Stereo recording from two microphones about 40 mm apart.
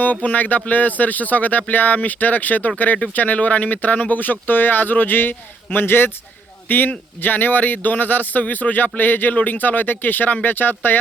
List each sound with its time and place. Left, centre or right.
0.0 s speech: left
6.7 s speech: left